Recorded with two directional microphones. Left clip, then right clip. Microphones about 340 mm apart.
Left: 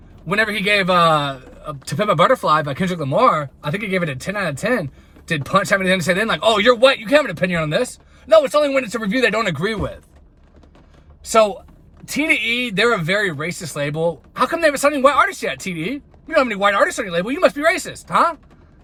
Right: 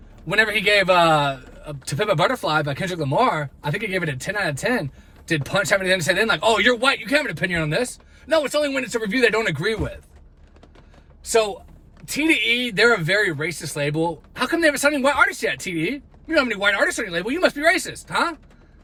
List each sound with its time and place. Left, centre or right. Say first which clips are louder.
0.3 s a man's voice: even; centre
12.1 s a man's voice: left 1 dB; centre